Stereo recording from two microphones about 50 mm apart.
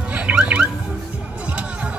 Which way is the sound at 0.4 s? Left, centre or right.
Right.